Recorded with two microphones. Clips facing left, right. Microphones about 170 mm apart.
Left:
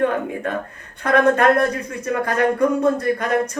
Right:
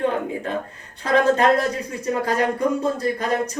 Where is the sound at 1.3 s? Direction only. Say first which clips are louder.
Left 2 dB; 60° left (ahead or behind).